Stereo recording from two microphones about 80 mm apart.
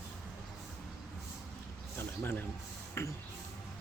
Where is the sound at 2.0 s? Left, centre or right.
Left.